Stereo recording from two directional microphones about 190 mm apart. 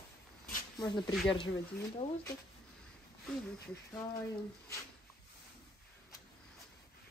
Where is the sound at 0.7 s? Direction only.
20° left (ahead or behind).